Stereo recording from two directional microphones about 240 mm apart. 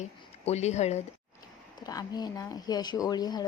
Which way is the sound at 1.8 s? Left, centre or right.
Centre.